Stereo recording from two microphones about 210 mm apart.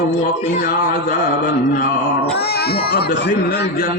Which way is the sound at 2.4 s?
50° left (ahead or behind).